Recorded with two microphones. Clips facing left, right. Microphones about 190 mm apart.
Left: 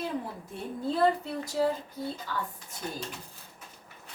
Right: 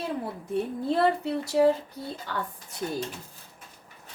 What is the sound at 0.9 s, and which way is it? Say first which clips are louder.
Speech: right 2 dB; 70° right (ahead or behind).